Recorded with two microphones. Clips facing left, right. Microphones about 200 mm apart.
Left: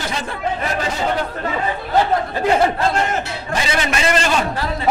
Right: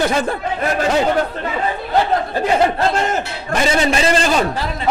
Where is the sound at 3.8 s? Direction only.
30° right (ahead or behind).